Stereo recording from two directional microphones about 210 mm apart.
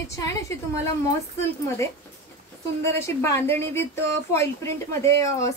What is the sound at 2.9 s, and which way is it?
A woman's voice, 15° left (ahead or behind).